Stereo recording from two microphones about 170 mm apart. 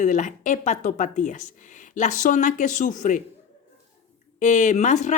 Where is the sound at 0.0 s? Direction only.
45° left (ahead or behind).